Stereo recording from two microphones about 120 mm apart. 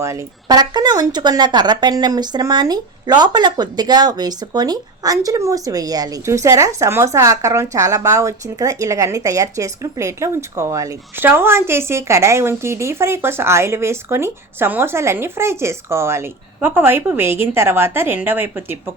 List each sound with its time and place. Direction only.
0.0 s speech: 25° right (ahead or behind)
0.4 s speech: 35° right (ahead or behind); by 18.8 s 15° right (ahead or behind)